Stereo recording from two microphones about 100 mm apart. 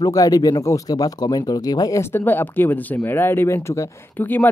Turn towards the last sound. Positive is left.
turn(degrees=20)  # may be behind; listen again after turning